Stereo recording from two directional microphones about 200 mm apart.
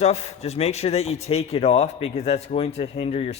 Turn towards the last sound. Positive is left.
turn(degrees=30)  # may be behind; listen again after turning